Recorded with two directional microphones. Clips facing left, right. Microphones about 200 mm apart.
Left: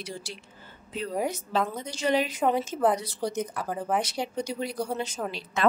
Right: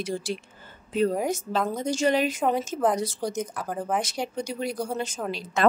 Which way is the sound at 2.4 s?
Centre (ahead or behind).